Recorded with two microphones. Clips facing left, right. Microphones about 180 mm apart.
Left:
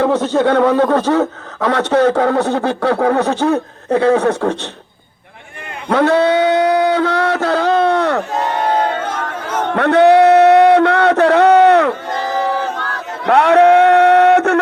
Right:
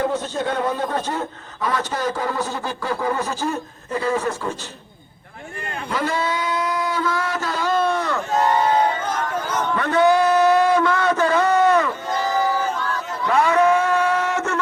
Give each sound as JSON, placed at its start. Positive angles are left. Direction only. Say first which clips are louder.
{"t": 0.0, "sound": "a man's voice", "louder": "left 9 dB", "side_deg": 75}
{"t": 5.9, "sound": "a sound", "louder": "left 12 dB", "side_deg": 70}
{"t": 12.4, "sound": "crowd", "louder": "left 3 dB", "side_deg": 65}